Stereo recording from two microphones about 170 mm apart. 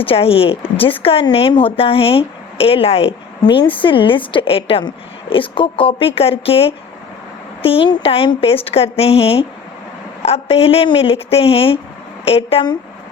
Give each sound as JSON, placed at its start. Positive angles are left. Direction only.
{"t": 0.0, "sound": "speech", "side_deg": 35}